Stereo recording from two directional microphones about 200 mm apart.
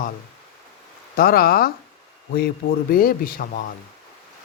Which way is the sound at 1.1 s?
45° left (ahead or behind).